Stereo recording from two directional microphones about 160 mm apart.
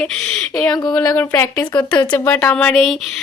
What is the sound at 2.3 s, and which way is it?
Speech, 10° left (ahead or behind).